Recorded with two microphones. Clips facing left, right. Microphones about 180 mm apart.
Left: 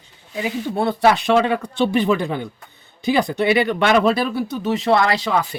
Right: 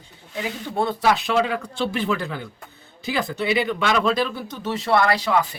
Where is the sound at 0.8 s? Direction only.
70° left (ahead or behind).